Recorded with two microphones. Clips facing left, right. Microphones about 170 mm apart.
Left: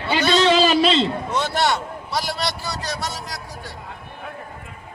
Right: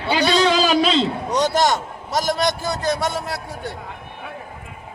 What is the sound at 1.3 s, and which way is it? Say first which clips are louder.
A man's voice: right 6 dB; 40° right (ahead or behind).